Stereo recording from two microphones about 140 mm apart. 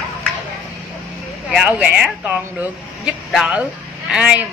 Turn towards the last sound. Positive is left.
turn(degrees=-5)  # may be behind; listen again after turning